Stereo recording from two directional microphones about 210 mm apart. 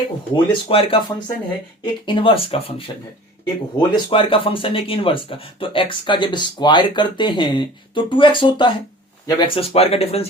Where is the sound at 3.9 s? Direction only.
25° left (ahead or behind).